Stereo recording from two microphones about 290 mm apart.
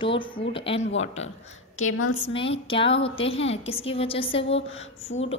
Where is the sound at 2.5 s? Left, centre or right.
Centre.